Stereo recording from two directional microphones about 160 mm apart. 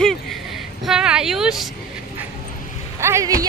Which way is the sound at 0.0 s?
Centre (ahead or behind).